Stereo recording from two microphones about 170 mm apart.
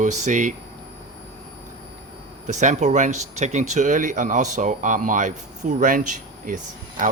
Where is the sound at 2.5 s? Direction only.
45° right (ahead or behind).